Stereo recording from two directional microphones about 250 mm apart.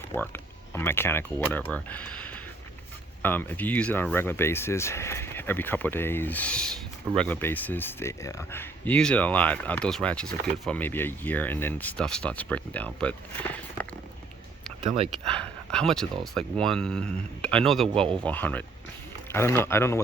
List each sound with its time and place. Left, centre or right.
0.1 s speech: centre
14.8 s speech: right
15.3 s speech: centre